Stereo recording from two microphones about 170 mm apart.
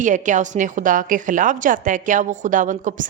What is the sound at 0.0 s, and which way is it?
A woman's voice, 45° right (ahead or behind).